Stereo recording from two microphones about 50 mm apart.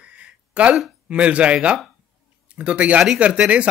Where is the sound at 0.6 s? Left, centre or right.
Right.